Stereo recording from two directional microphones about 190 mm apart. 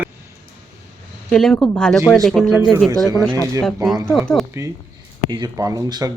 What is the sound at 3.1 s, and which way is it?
Speech, 20° right (ahead or behind).